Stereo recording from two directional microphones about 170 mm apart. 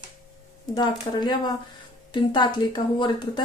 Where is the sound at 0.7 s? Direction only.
25° left (ahead or behind).